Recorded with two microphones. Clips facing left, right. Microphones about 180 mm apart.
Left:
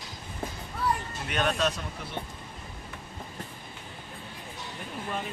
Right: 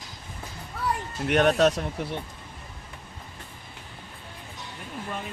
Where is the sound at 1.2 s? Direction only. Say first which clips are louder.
Right 8 dB; 70° right (ahead or behind).